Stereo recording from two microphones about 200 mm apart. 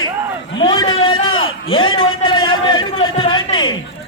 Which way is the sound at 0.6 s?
25° left (ahead or behind).